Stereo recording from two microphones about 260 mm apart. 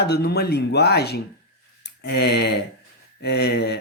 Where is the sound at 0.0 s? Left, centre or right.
Left.